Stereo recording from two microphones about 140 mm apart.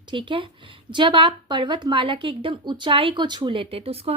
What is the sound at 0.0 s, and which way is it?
A woman's voice, 35° right (ahead or behind).